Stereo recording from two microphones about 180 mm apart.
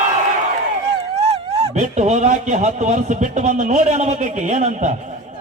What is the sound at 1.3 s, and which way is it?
Speech, 35° right (ahead or behind).